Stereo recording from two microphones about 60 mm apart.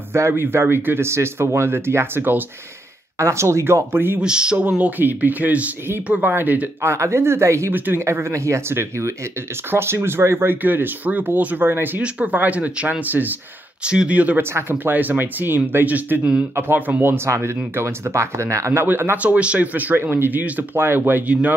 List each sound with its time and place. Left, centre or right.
0.3 s speech: right
3.2 s speech: right
3.9 s speech: right
4.2 s speech: centre; by 6.7 s right
6.8 s speech: right
7.7 s speech: right
8.0 s speech: right
12.0 s speech: centre
13.8 s speech: centre
14.4 s speech: right
17.3 s speech: right
18.9 s speech: right
19.1 s speech: right
21.3 s speech: right